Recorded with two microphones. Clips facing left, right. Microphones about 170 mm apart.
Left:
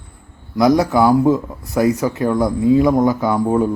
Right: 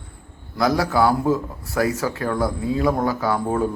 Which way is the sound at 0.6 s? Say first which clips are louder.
Left 5 dB; 20° left (ahead or behind).